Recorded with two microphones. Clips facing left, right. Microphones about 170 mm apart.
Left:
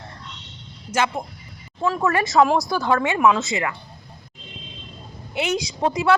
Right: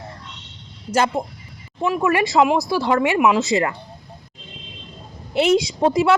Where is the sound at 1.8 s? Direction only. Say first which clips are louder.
Right 2 dB; 15° right (ahead or behind).